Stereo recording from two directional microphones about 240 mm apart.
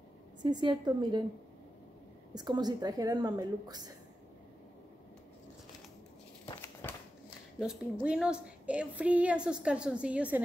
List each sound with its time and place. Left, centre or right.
0.4 s a woman's voice: centre
2.3 s a woman's voice: centre
6.6 s a sound: centre
7.5 s a woman's voice: centre